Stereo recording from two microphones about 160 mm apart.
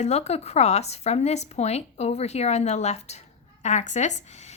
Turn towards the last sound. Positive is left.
turn(degrees=45)  # may be behind; listen again after turning